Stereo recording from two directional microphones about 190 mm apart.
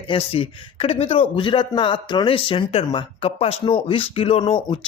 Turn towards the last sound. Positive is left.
turn(degrees=30)  # may be behind; listen again after turning